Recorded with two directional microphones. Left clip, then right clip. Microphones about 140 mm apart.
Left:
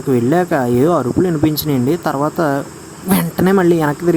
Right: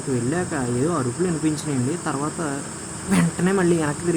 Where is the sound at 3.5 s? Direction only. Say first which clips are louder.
Left 8 dB; 45° left (ahead or behind).